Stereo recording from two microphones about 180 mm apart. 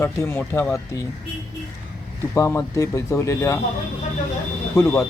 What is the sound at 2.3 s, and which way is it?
Speech, 15° left (ahead or behind).